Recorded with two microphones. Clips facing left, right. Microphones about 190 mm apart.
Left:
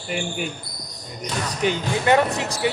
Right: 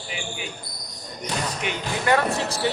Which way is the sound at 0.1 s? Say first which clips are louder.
Left 8 dB; 50° left (ahead or behind).